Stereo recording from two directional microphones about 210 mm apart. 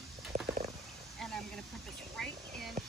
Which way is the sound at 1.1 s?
Centre (ahead or behind).